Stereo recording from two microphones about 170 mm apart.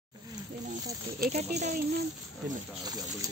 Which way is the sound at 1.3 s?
40° right (ahead or behind).